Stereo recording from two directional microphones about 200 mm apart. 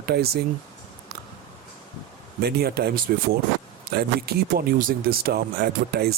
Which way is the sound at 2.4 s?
50° right (ahead or behind).